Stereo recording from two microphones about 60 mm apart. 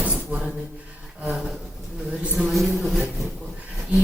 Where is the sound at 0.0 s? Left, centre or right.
Right.